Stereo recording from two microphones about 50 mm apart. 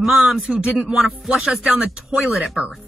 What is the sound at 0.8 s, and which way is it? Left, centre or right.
Music, right.